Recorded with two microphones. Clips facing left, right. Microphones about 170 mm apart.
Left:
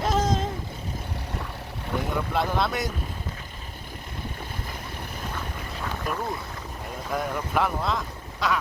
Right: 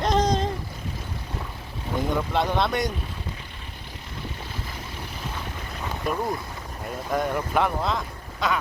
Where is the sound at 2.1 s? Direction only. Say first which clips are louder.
Right 2 dB; centre (ahead or behind).